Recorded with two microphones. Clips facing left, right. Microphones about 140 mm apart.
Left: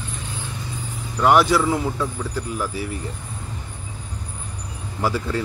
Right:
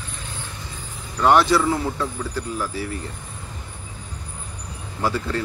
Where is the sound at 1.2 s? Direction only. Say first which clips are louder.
Even; 10° left (ahead or behind).